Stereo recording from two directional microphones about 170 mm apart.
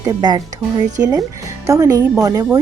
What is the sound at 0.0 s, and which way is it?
Speech, 20° right (ahead or behind).